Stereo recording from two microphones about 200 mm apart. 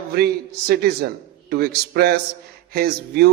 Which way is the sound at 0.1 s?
55° right (ahead or behind).